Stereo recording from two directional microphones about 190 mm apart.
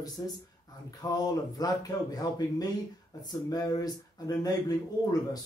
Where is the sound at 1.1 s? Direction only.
20° left (ahead or behind).